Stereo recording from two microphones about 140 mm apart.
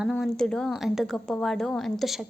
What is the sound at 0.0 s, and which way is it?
A woman's voice, centre (ahead or behind).